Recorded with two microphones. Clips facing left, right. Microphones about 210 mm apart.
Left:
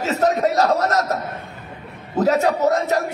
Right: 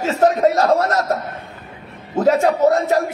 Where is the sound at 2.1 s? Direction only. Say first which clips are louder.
Right 2 dB; 40° left (ahead or behind).